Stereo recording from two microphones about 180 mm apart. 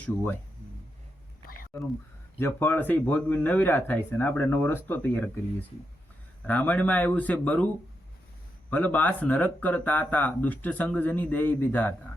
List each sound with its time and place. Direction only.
1.7 s speech: 15° left (ahead or behind)
8.7 s speech: 10° left (ahead or behind)